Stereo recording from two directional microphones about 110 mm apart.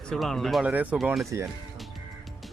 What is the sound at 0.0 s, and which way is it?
Speech, 5° left (ahead or behind).